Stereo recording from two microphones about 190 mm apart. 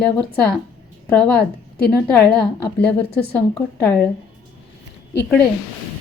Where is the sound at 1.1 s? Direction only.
5° left (ahead or behind).